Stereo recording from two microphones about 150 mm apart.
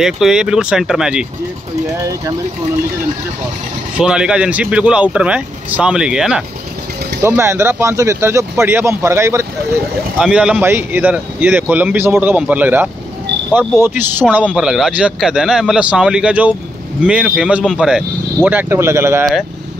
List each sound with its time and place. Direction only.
0.0 s a man's voice: 5° right (ahead or behind)
4.0 s speech: 5° right (ahead or behind)
7.2 s speech: 15° right (ahead or behind)
10.1 s a man's voice: 5° right (ahead or behind)